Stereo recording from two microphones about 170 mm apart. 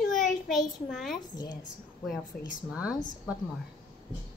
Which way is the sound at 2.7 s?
5° right (ahead or behind).